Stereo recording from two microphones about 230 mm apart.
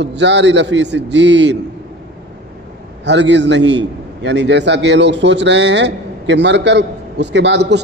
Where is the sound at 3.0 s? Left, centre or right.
Right.